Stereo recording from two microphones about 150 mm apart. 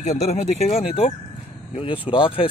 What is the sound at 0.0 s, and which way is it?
Speech, 50° left (ahead or behind).